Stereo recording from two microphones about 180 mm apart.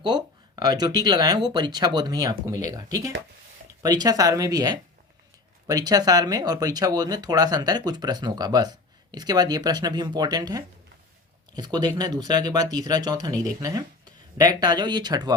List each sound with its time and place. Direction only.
0.0 s speech: 25° right (ahead or behind)